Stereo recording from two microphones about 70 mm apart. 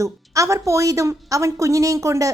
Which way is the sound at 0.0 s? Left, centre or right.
Right.